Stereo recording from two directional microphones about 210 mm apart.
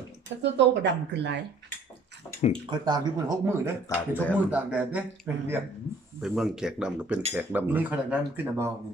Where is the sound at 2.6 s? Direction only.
20° right (ahead or behind).